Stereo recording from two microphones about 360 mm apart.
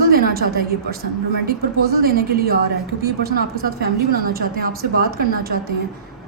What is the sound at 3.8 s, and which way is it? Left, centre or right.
A woman's voice, right.